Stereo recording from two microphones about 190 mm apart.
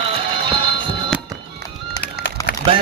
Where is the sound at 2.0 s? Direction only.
55° left (ahead or behind).